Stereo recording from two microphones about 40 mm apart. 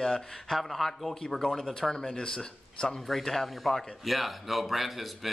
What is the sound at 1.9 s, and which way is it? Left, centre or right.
Speech, centre.